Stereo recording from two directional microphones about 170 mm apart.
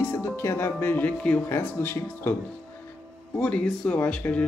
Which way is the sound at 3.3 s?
5° left (ahead or behind).